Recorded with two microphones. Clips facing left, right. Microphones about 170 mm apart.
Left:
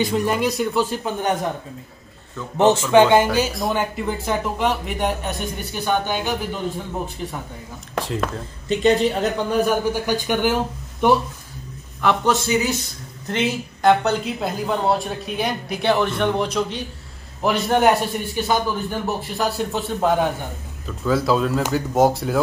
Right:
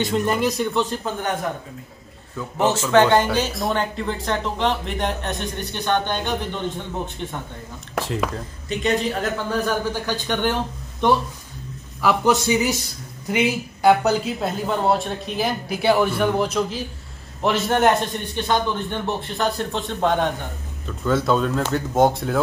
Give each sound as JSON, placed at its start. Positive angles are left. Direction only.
{"t": 0.0, "sound": "a man's voice", "side_deg": 0}
{"t": 1.0, "sound": "speech", "side_deg": 15}
{"t": 2.5, "sound": "speech", "side_deg": 15}
{"t": 9.2, "sound": "speech", "side_deg": 15}
{"t": 12.0, "sound": "a man's voice", "side_deg": -5}